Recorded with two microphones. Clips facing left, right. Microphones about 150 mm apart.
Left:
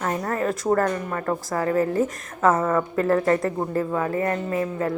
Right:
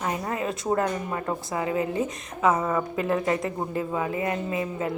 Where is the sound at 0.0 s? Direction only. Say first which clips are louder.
Left 3 dB; 15° right (ahead or behind).